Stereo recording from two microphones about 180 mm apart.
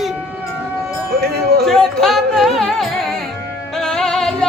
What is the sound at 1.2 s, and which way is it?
Speech, 60° right (ahead or behind).